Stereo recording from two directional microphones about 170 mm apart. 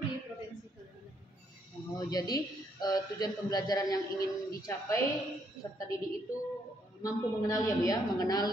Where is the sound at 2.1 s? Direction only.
25° left (ahead or behind).